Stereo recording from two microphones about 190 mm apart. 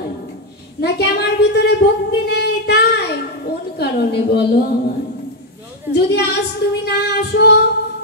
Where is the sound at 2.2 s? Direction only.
60° left (ahead or behind).